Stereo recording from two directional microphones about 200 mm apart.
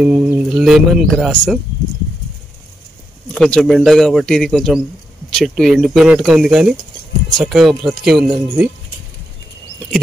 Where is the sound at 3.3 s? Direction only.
Centre (ahead or behind).